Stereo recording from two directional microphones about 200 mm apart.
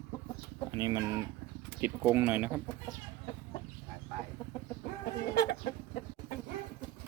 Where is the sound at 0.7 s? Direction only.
20° right (ahead or behind).